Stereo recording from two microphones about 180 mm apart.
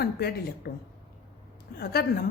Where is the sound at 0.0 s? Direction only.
60° left (ahead or behind).